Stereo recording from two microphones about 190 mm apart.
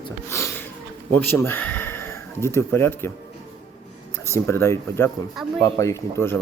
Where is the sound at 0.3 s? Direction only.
15° left (ahead or behind).